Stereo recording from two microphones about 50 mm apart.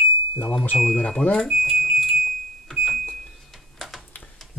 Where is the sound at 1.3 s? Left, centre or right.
Centre.